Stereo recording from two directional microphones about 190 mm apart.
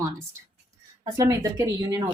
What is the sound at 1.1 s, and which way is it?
Speech, 15° right (ahead or behind).